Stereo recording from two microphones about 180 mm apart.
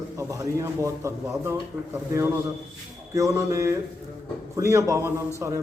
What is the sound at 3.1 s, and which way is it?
A man's voice, 20° right (ahead or behind).